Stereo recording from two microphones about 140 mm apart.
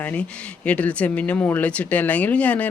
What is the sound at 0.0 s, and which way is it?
Speech, 10° left (ahead or behind).